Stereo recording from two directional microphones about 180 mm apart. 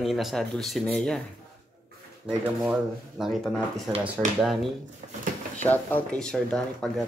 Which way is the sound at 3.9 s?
35° right (ahead or behind).